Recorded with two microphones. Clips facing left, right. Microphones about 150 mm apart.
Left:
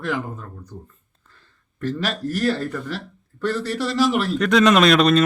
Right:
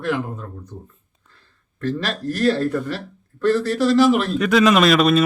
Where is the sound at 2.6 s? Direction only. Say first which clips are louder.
Right 5 dB; centre (ahead or behind).